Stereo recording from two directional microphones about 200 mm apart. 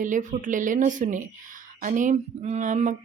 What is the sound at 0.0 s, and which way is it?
Speech, 40° right (ahead or behind).